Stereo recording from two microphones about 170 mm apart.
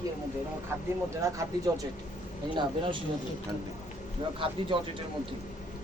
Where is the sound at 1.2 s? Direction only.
20° right (ahead or behind).